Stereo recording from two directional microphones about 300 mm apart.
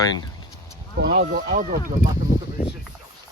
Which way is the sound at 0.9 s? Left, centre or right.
Right.